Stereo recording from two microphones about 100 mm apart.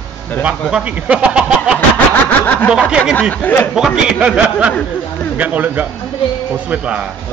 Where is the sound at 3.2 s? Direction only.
15° left (ahead or behind).